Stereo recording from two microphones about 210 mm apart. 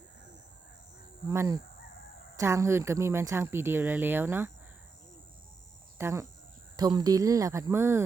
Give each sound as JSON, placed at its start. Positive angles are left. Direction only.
{"t": 1.3, "sound": "speech", "side_deg": -15}
{"t": 6.0, "sound": "speech", "side_deg": -15}